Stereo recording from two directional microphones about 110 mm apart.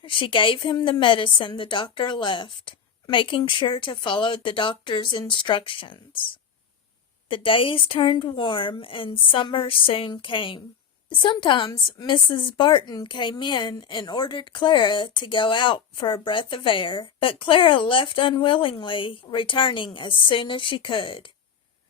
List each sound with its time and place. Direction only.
0.0 s a woman's voice: 50° left (ahead or behind)